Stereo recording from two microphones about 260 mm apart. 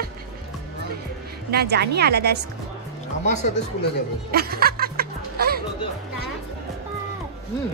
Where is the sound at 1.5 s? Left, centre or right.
Right.